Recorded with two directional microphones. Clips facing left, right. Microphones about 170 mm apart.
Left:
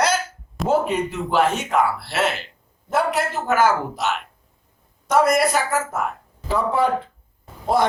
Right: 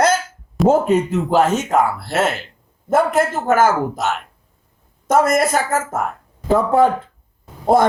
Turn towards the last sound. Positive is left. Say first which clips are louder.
# right 5 dB
turn(degrees=-50)  # may be behind; listen again after turning